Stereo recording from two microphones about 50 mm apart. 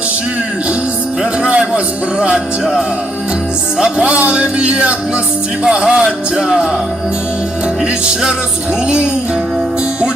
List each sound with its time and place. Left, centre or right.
1.2 s speech: right
3.8 s music: centre
4.0 s speech: right
5.6 s music: centre
7.8 s music: centre